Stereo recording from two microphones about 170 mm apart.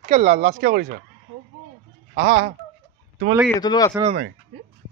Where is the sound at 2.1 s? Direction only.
80° right.